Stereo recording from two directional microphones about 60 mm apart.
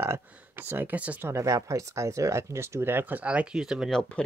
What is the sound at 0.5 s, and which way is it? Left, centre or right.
Speech, right.